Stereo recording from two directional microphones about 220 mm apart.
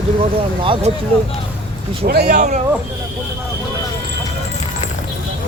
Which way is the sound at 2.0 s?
45° right (ahead or behind).